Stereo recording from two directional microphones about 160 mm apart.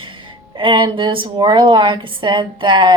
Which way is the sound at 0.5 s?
30° right (ahead or behind).